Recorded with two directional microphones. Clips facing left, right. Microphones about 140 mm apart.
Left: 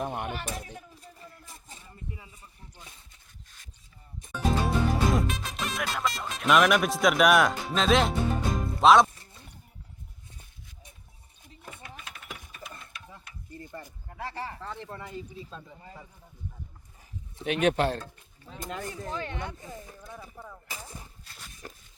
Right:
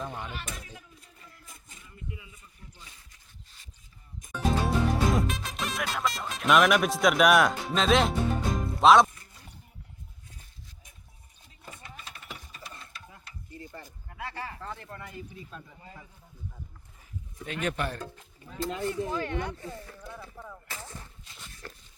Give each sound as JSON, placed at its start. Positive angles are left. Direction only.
{"t": 0.1, "sound": "speech", "side_deg": 60}
{"t": 0.3, "sound": "speech", "side_deg": 40}
{"t": 0.9, "sound": "a sound", "side_deg": 35}
{"t": 4.3, "sound": "music", "side_deg": 0}
{"t": 11.6, "sound": "sewing machine", "side_deg": 0}
{"t": 14.1, "sound": "speech", "side_deg": 35}
{"t": 14.8, "sound": "speech", "side_deg": 15}
{"t": 17.4, "sound": "speech", "side_deg": 85}
{"t": 18.4, "sound": "speech", "side_deg": 20}
{"t": 20.4, "sound": "a sound", "side_deg": 10}